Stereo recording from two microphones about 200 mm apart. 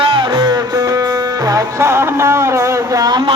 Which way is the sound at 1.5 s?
15° right (ahead or behind).